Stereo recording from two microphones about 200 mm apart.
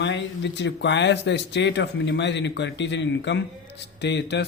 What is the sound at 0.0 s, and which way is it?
Speech, 60° left (ahead or behind).